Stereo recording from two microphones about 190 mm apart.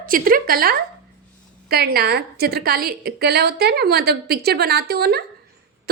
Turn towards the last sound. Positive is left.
turn(degrees=-55)  # may be behind; listen again after turning